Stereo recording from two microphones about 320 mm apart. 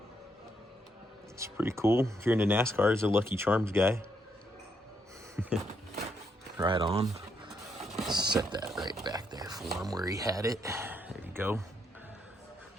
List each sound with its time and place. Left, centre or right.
1.4 s speech: centre
5.4 s a sound: centre
6.6 s speech: centre